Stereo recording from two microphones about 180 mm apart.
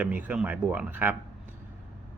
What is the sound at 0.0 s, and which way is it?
Speech, 10° right (ahead or behind).